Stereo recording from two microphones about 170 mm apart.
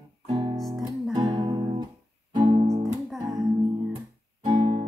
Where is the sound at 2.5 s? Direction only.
40° right (ahead or behind).